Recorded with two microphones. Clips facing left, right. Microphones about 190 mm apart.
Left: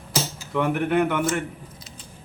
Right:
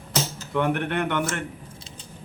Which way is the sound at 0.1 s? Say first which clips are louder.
Even; 5° left (ahead or behind).